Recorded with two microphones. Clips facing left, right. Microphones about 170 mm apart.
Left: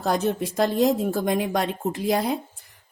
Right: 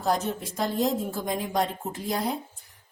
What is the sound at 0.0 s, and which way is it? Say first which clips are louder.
Speech: left 4 dB; 75° left (ahead or behind).